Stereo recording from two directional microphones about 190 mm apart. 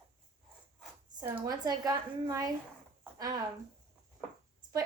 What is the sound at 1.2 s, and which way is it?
Speech, 10° right (ahead or behind).